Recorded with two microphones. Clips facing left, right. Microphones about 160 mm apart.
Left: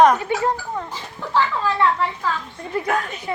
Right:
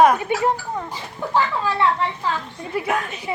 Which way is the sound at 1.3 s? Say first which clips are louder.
Left 1 dB; 15° right (ahead or behind).